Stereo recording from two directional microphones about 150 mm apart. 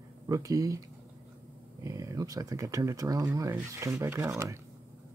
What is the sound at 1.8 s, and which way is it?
Speech, 20° right (ahead or behind).